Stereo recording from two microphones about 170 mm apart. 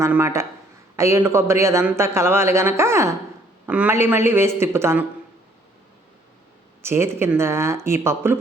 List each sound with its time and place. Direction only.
0.0 s a man's voice: 15° right (ahead or behind)
6.8 s a man's voice: 15° right (ahead or behind)